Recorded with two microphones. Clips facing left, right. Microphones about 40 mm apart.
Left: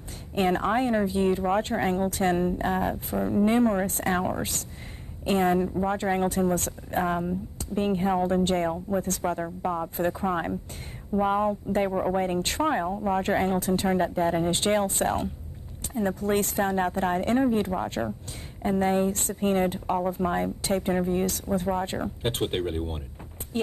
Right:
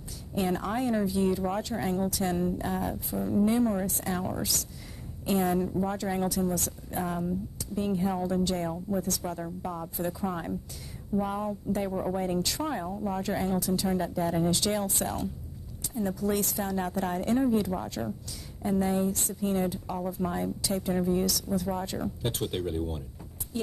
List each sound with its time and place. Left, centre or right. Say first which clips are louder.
0.3 s speech: left 5 dB; left